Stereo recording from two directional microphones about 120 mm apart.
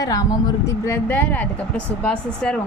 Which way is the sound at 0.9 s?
15° left (ahead or behind).